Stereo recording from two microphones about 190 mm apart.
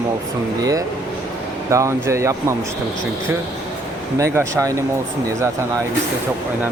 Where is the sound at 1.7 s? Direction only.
15° right (ahead or behind).